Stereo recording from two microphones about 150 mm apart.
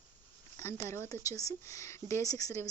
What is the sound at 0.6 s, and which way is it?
Speech, 15° left (ahead or behind).